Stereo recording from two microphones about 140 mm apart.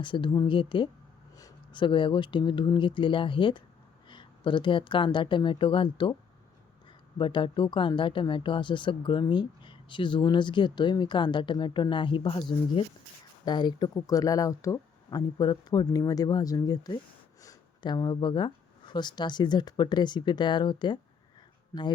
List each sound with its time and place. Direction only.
0.0 s a woman's voice: 35° left (ahead or behind)
7.2 s a woman's voice: 35° left (ahead or behind)